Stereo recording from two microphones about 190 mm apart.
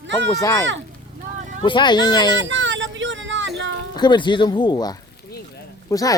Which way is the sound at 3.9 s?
25° left (ahead or behind).